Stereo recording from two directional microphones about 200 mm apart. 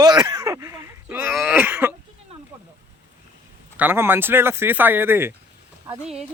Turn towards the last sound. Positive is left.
turn(degrees=-5)  # may be behind; listen again after turning